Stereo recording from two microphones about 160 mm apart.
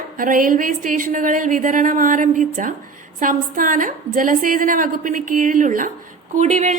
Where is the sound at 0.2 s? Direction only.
60° right (ahead or behind).